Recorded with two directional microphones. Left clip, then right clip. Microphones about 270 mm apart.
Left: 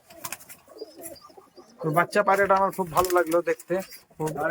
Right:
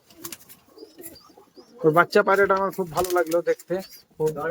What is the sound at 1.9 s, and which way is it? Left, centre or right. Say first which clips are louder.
Speech: right 3 dB; centre.